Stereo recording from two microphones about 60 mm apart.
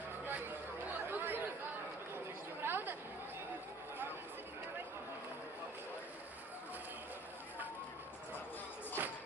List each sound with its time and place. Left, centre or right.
0.3 s chatter: right
2.6 s chatter: right
9.0 s music: right